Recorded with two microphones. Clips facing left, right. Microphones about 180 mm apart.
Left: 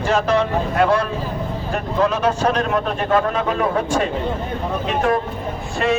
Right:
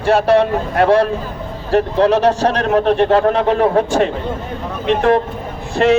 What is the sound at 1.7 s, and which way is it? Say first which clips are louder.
A man's voice: right 8 dB; 70° right (ahead or behind).